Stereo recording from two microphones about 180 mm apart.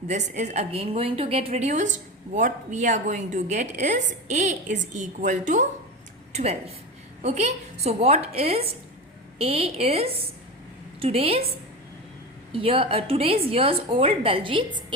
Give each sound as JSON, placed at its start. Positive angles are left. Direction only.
{"t": 0.1, "sound": "a woman's voice", "side_deg": -40}
{"t": 12.5, "sound": "a woman's voice", "side_deg": -30}